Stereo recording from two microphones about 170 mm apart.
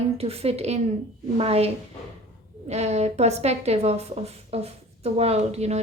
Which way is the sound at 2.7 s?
40° right (ahead or behind).